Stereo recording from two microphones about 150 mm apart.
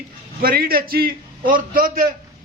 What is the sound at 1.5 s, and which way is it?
Speech, 65° right (ahead or behind).